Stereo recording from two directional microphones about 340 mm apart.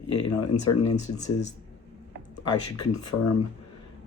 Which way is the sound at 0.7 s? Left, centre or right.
Left.